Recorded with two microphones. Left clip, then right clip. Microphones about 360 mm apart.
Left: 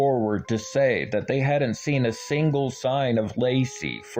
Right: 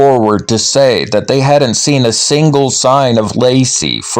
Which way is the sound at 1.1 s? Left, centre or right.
Centre.